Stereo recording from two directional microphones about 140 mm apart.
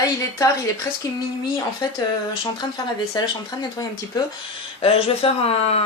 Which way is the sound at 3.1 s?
30° left (ahead or behind).